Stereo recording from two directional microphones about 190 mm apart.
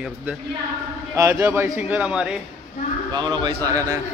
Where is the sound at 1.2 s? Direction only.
15° right (ahead or behind).